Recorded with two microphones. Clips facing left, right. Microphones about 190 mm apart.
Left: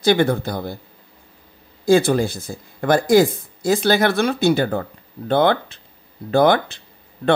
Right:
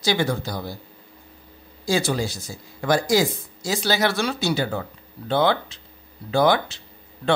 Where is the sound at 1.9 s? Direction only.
55° left (ahead or behind).